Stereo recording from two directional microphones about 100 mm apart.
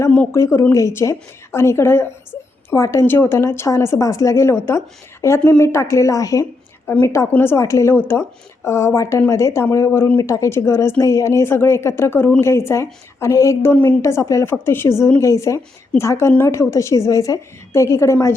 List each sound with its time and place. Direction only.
0.3 s a woman's voice: 25° left (ahead or behind)